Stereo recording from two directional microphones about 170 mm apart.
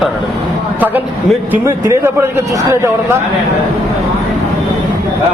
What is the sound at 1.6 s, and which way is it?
A man's voice, 15° right (ahead or behind).